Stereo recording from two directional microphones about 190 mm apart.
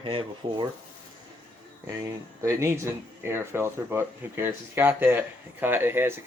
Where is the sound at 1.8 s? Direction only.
15° right (ahead or behind).